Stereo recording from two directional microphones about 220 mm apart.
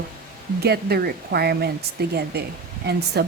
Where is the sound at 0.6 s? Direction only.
45° right (ahead or behind).